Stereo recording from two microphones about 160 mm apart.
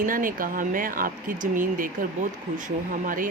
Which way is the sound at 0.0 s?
60° right (ahead or behind).